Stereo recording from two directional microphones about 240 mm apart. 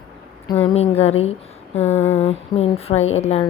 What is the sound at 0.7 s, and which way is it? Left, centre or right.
Speech, left.